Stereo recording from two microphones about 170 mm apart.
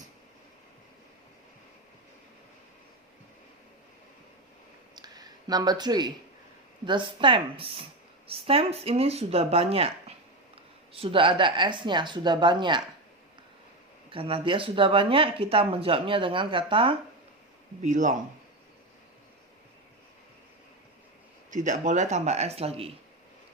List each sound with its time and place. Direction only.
4.9 s a sound: 25° right (ahead or behind)
6.8 s speech: 30° right (ahead or behind)
14.1 s speech: 35° right (ahead or behind)
17.8 s a man's voice: 45° right (ahead or behind)
21.5 s speech: 45° right (ahead or behind)